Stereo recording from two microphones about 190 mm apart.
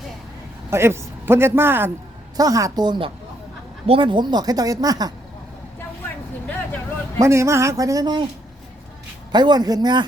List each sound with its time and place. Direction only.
0.7 s a man's voice: 15° right (ahead or behind)
7.2 s speech: 15° right (ahead or behind)
9.3 s speech: 20° right (ahead or behind)